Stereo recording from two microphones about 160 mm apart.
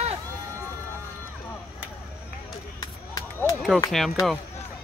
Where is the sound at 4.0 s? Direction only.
Centre (ahead or behind).